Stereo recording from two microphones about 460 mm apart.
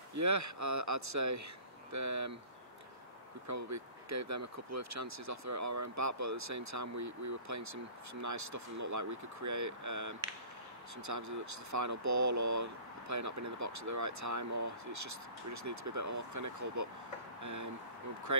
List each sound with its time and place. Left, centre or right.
0.1 s speech: right
3.4 s speech: right